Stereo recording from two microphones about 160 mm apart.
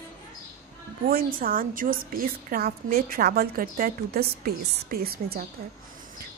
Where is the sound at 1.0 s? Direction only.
65° right (ahead or behind).